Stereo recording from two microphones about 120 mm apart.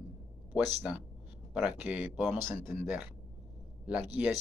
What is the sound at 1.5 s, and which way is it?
Speech, 10° right (ahead or behind).